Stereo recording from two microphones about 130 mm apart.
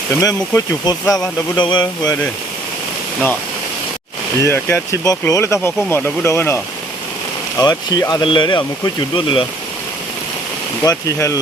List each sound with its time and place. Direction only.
0.2 s speech: 25° left (ahead or behind)
4.4 s speech: 20° left (ahead or behind)
7.6 s speech: 30° left (ahead or behind)
8.2 s speech: 40° left (ahead or behind)
10.8 s speech: 25° left (ahead or behind)